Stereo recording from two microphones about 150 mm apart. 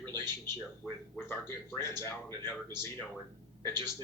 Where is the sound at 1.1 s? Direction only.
15° left (ahead or behind).